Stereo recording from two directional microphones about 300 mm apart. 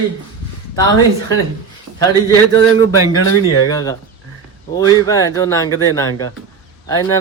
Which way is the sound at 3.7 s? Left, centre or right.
Centre.